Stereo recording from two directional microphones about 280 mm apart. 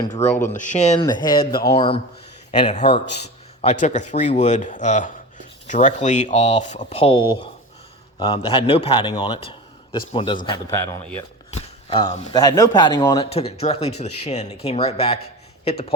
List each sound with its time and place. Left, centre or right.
0.0 s a man's voice: left
13.3 s speech: left